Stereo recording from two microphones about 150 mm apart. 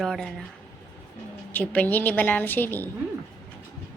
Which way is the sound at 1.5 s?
10° left (ahead or behind).